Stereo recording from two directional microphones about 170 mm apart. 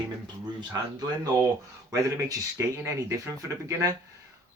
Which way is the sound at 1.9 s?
20° right (ahead or behind).